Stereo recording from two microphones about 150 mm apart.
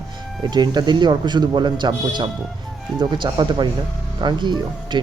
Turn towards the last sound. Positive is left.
turn(degrees=-30)  # may be behind; listen again after turning